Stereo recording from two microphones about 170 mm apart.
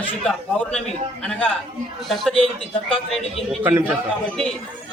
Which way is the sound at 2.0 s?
Centre (ahead or behind).